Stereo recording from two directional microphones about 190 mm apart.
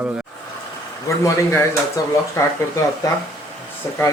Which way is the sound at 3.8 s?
15° left (ahead or behind).